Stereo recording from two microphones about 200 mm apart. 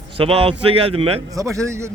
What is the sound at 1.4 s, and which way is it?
Speech, 15° right (ahead or behind).